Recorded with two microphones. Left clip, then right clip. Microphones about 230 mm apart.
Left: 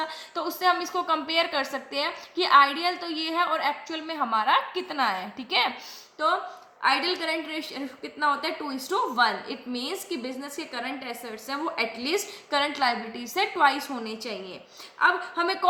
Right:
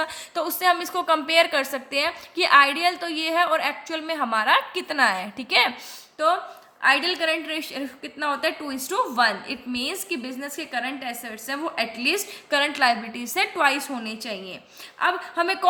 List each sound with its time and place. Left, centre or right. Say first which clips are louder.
0.0 s a woman's voice: right 4 dB; right
6.8 s a woman's voice: right 4 dB; right